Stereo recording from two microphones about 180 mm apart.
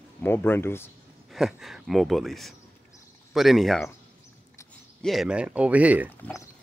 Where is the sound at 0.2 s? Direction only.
10° left (ahead or behind).